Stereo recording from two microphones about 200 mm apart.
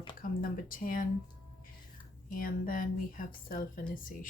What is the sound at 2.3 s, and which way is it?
A woman's voice, 45° left (ahead or behind).